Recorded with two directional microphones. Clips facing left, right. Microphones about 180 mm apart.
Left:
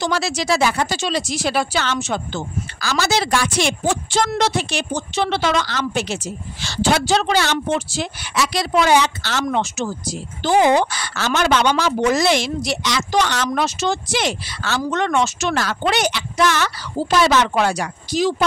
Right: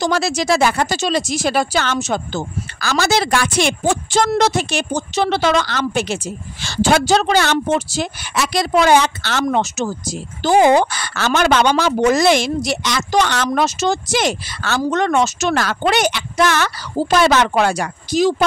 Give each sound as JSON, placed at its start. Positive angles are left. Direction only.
{"t": 0.0, "sound": "a woman's voice", "side_deg": -45}
{"t": 13.5, "sound": "a woman's voice", "side_deg": -45}